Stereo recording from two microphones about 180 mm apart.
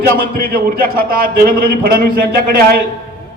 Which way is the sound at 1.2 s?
55° right (ahead or behind).